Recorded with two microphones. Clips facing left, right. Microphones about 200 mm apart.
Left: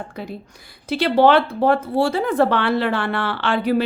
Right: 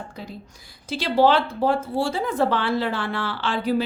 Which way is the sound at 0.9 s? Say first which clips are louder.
Left 4 dB; 60° left (ahead or behind).